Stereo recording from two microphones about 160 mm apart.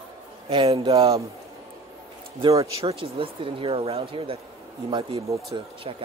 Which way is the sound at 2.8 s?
35° right (ahead or behind).